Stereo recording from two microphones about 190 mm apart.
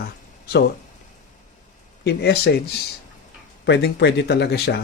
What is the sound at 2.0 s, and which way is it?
Speech, 60° left (ahead or behind).